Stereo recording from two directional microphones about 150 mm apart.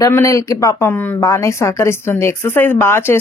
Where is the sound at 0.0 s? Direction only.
20° left (ahead or behind).